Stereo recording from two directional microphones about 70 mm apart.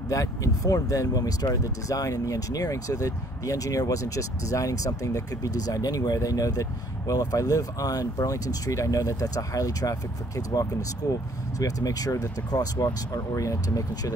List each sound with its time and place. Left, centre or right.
0.1 s speech: left
13.3 s speech: left